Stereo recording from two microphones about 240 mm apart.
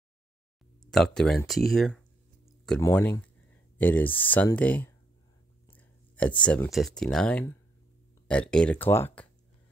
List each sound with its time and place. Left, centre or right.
0.8 s speech: centre
2.4 s a sound: centre
2.8 s speech: centre